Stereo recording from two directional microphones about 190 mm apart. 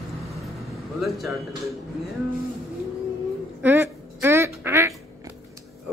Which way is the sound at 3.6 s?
10° right (ahead or behind).